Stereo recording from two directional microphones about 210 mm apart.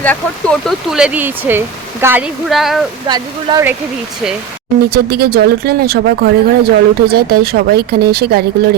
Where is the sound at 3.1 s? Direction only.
15° right (ahead or behind).